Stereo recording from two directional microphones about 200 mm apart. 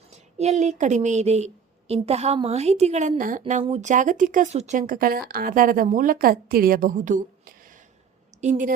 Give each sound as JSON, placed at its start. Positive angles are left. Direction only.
{"t": 0.1, "sound": "a woman's voice", "side_deg": -35}